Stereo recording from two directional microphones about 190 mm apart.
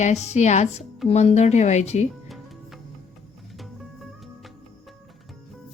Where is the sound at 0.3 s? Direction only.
35° left (ahead or behind).